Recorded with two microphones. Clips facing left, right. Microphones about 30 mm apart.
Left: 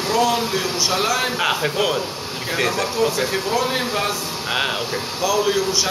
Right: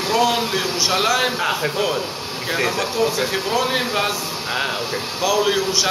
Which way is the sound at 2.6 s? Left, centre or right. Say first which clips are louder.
Left 1 dB; centre.